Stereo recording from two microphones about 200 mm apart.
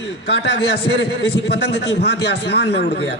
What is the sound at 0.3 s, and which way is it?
A man's voice, 55° left (ahead or behind).